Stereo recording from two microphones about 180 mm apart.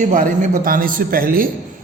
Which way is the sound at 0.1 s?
50° right (ahead or behind).